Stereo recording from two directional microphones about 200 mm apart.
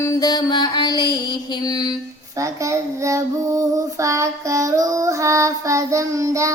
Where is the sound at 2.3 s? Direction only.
15° right (ahead or behind).